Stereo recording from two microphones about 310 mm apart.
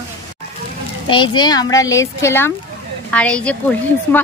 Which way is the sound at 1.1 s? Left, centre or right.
Centre.